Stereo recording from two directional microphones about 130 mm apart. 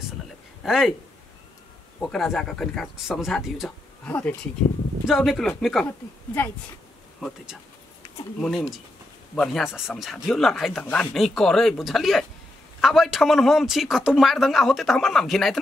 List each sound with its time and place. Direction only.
0.7 s speech: centre (ahead or behind)
2.0 s speech: 5° left (ahead or behind)
4.0 s a woman's voice: 10° left (ahead or behind)
5.0 s speech: centre (ahead or behind)
5.9 s a woman's voice: 15° left (ahead or behind)
7.2 s speech: 5° left (ahead or behind)
10.8 s a woman's voice: 10° left (ahead or behind)